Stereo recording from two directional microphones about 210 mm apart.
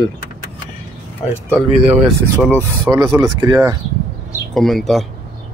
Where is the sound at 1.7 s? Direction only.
30° right (ahead or behind).